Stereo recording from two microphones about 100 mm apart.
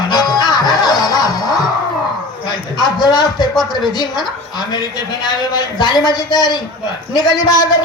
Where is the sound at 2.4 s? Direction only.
45° left (ahead or behind).